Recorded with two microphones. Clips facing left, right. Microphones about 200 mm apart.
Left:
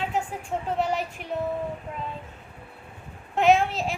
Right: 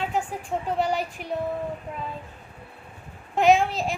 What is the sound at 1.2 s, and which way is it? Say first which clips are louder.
Speech: right 2 dB; 35° right (ahead or behind).